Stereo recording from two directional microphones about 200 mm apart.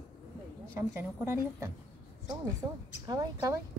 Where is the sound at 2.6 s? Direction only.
10° right (ahead or behind).